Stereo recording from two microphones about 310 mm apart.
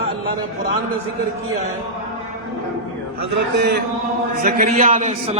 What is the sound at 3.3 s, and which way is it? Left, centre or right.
A man's voice, right.